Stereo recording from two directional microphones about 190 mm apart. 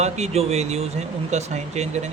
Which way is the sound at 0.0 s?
35° right (ahead or behind).